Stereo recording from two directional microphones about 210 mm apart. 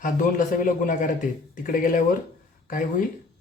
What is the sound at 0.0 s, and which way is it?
Speech, 40° left (ahead or behind).